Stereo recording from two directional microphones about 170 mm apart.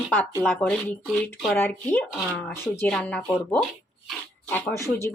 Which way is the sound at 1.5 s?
10° left (ahead or behind).